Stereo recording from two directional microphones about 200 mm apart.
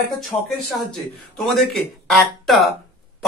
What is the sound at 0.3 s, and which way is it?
Speech, 15° left (ahead or behind).